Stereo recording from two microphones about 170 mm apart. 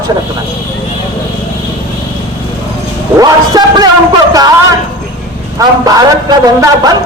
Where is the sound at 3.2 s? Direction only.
25° right (ahead or behind).